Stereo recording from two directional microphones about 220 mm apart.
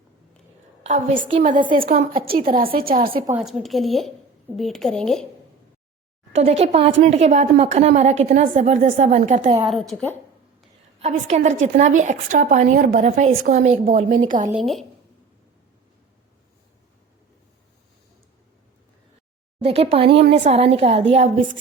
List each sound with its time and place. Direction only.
0.8 s a woman's voice: 30° right (ahead or behind)
3.3 s speech: centre (ahead or behind)
6.3 s a woman's voice: 30° right (ahead or behind)
9.6 s speech: centre (ahead or behind)
11.0 s a woman's voice: 30° right (ahead or behind)
14.5 s speech: centre (ahead or behind)
19.6 s a woman's voice: 25° right (ahead or behind)